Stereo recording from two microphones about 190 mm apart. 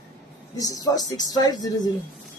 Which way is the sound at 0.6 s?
20° left (ahead or behind).